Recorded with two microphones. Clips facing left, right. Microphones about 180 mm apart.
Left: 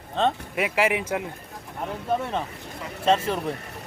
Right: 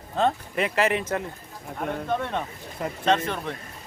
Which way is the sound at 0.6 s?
10° left (ahead or behind).